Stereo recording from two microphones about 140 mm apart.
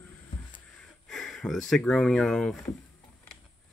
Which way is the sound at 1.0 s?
Centre (ahead or behind).